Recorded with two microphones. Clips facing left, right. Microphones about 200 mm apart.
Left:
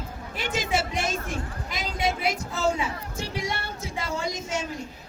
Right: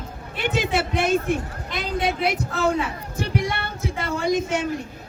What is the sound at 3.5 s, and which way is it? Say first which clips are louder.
Female singing: right 5 dB; 60° right (ahead or behind).